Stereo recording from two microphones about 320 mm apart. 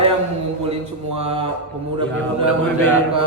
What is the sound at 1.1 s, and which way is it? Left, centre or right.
Speech, centre.